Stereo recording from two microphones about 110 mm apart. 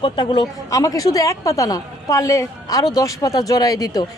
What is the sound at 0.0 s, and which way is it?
Speech, 45° left (ahead or behind).